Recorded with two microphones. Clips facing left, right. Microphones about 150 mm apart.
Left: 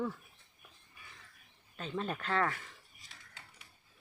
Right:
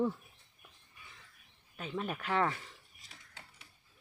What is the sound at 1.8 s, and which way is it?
Speech, 10° right (ahead or behind).